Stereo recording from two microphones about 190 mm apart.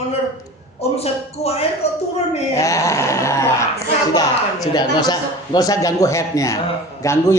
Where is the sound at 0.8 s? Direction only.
30° left (ahead or behind).